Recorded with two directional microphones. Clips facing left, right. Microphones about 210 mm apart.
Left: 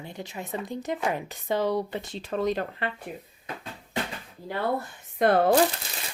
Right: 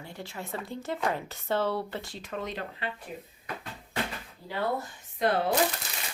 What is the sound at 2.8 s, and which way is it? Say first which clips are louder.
Speech: left 4 dB; 55° left (ahead or behind).